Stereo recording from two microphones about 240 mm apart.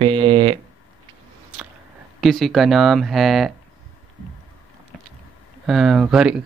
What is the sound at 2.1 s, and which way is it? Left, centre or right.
Speech, centre.